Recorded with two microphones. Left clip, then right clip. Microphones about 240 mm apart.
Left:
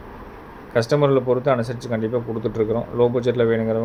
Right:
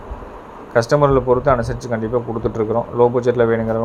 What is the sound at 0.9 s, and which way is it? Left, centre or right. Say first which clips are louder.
A man's voice: right 3 dB; centre.